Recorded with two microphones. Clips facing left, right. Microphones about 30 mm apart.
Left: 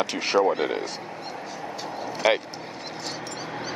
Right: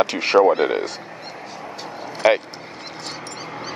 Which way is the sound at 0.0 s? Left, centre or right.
Right.